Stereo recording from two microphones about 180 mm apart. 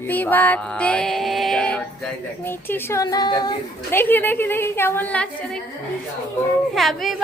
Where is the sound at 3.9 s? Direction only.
10° left (ahead or behind).